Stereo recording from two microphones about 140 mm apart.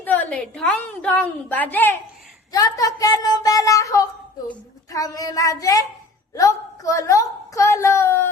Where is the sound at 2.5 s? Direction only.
25° left (ahead or behind).